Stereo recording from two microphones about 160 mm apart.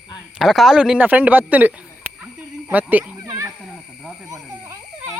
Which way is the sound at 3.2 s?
20° right (ahead or behind).